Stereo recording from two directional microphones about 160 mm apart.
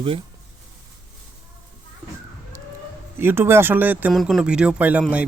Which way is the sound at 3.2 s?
15° right (ahead or behind).